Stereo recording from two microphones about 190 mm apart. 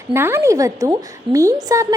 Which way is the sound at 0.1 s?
10° right (ahead or behind).